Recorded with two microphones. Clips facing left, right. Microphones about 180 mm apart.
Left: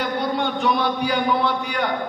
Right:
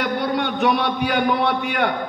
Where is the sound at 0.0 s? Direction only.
65° right (ahead or behind).